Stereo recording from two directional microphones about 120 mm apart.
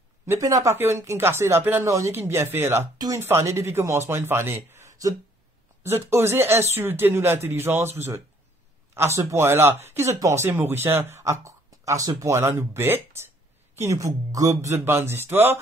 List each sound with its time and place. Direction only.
0.3 s speech: 30° right (ahead or behind)